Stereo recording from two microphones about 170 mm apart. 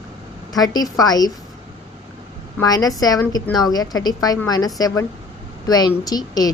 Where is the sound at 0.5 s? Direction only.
20° left (ahead or behind).